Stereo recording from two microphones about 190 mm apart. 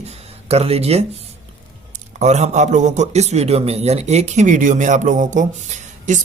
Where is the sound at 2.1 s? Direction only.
35° right (ahead or behind).